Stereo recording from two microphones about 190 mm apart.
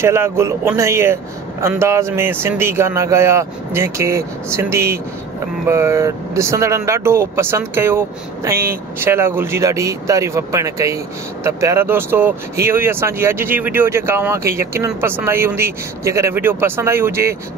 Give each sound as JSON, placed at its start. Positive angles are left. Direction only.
{"t": 0.0, "sound": "speech", "side_deg": -15}